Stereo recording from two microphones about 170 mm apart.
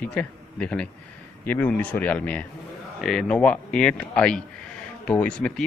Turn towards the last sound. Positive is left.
turn(degrees=5)  # may be behind; listen again after turning